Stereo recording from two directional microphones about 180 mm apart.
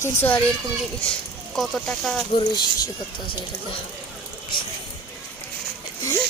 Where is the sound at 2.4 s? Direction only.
25° left (ahead or behind).